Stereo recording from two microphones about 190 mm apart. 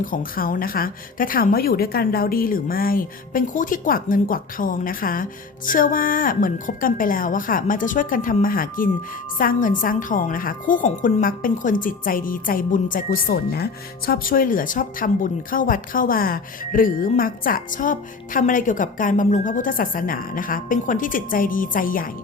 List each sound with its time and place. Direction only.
0.0 s speech: 45° left (ahead or behind)